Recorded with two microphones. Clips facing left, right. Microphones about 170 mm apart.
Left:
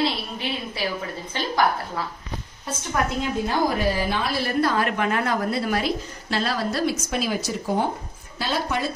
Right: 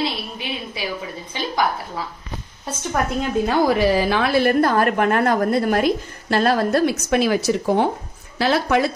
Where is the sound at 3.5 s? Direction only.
90° right.